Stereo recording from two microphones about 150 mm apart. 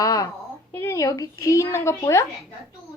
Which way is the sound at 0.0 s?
20° left (ahead or behind).